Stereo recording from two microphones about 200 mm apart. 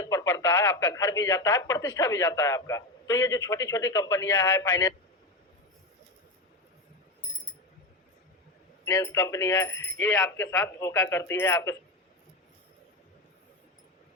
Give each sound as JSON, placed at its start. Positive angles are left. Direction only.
{"t": 0.0, "sound": "speech", "side_deg": 15}
{"t": 8.8, "sound": "speech", "side_deg": 15}